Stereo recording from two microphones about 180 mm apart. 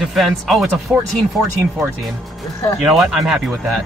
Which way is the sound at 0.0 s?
Centre (ahead or behind).